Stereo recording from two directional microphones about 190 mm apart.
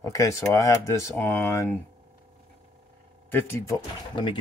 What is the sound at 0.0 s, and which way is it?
Speech, 15° left (ahead or behind).